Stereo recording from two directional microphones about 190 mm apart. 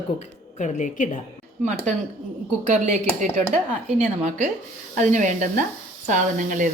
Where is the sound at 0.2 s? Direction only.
40° left (ahead or behind).